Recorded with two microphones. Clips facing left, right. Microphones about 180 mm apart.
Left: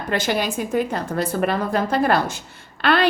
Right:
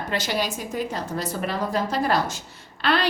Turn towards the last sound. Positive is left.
turn(degrees=55)  # may be behind; listen again after turning